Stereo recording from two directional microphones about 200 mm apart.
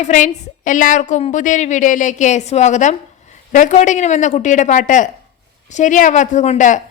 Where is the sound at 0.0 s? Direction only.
40° left (ahead or behind).